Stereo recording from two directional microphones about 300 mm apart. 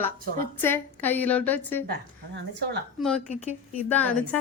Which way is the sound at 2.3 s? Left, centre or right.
Right.